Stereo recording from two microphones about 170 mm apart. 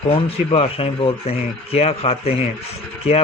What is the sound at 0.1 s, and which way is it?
Speech, 35° left (ahead or behind).